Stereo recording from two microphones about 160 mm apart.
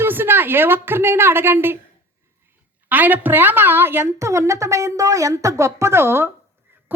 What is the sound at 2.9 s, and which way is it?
A woman's voice, 10° right (ahead or behind).